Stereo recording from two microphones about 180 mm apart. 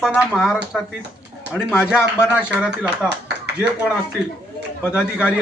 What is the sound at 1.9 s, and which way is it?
Speech, 5° right (ahead or behind).